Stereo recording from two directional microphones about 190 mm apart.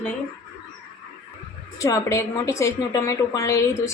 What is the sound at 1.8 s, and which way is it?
A woman's voice, 15° left (ahead or behind).